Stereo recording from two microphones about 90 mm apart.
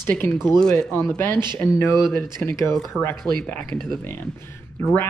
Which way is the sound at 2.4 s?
25° left (ahead or behind).